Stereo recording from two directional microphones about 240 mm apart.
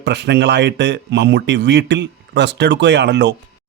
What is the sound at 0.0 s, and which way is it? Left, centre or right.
Speech, right.